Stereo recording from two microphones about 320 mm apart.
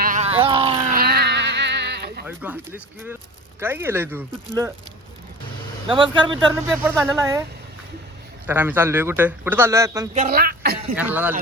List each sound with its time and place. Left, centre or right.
0.0 s a sound: right
0.9 s a sound: right
2.2 s a man's voice: centre
5.9 s a man's voice: centre
8.4 s a man's voice: centre
10.2 s speech: right
10.9 s speech: centre